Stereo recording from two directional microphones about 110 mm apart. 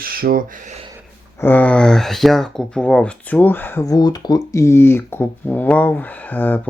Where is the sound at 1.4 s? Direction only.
15° left (ahead or behind).